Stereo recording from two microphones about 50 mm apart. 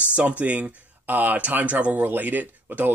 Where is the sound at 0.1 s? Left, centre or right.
Right.